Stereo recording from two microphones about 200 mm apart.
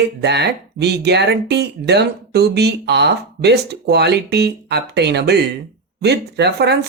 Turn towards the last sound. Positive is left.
turn(degrees=-55)  # may be behind; listen again after turning